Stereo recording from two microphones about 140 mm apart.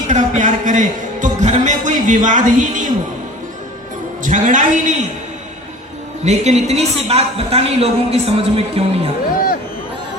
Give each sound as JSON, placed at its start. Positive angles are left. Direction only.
{"t": 0.1, "sound": "a man's voice", "side_deg": -60}
{"t": 4.2, "sound": "a man's voice", "side_deg": -65}
{"t": 6.2, "sound": "a woman's voice", "side_deg": -50}